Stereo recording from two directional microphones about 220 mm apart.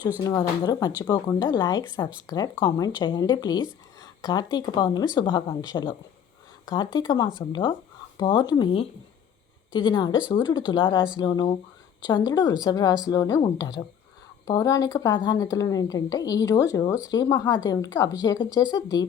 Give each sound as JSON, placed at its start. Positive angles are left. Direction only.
{"t": 0.3, "sound": "a woman's voice", "side_deg": 15}
{"t": 4.0, "sound": "a sound", "side_deg": 20}
{"t": 4.5, "sound": "a woman's voice", "side_deg": 20}